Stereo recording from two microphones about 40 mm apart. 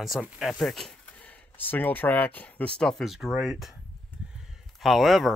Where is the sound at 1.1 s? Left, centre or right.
Left.